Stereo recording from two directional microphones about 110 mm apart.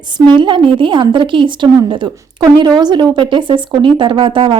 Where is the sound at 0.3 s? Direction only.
45° right (ahead or behind).